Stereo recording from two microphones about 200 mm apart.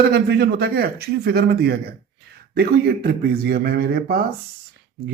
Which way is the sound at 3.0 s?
50° right (ahead or behind).